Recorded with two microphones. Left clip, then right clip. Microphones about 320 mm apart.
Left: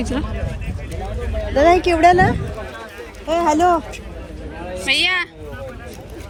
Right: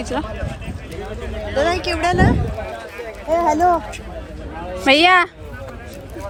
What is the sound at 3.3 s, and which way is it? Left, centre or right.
Speech, left.